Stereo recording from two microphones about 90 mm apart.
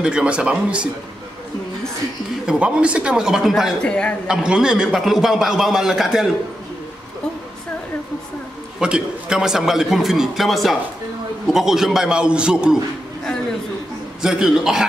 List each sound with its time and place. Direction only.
0.0 s speech: 10° right (ahead or behind)
2.4 s speech: 10° right (ahead or behind)
3.8 s a man's voice: 10° left (ahead or behind)
4.3 s a man's voice: 10° right (ahead or behind)
8.7 s a man's voice: 10° right (ahead or behind)
14.2 s a man's voice: 5° right (ahead or behind)